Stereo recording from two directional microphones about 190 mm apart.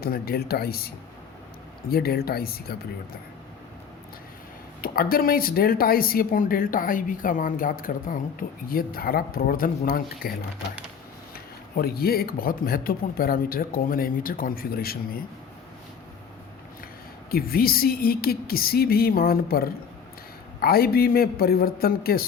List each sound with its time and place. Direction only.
0.0 s speech: 55° left (ahead or behind)
1.9 s speech: 55° left (ahead or behind)
4.8 s speech: 50° left (ahead or behind)
11.7 s speech: 55° left (ahead or behind)
17.3 s speech: 50° left (ahead or behind)